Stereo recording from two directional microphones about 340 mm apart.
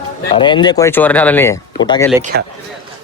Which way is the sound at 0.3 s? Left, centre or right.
Centre.